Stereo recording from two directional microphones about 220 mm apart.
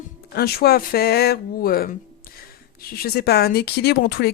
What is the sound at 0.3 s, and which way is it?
Speech, 45° left (ahead or behind).